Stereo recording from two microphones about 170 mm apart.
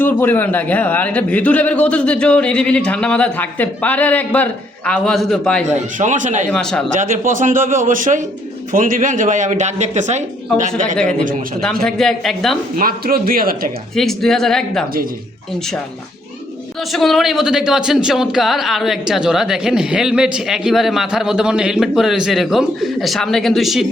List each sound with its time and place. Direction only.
0.0 s a man's voice: 10° left (ahead or behind)
5.6 s speech: 45° right (ahead or behind)
6.5 s speech: 5° left (ahead or behind)
6.9 s speech: 50° right (ahead or behind)
11.8 s speech: 5° left (ahead or behind)
12.7 s a man's voice: 60° right (ahead or behind)
13.9 s speech: centre (ahead or behind)
16.9 s speech: centre (ahead or behind)